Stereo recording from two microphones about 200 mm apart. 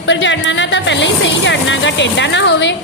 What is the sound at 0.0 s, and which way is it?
Music, 65° left (ahead or behind).